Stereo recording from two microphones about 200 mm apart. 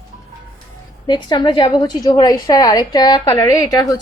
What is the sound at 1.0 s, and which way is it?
A woman's voice, 20° left (ahead or behind).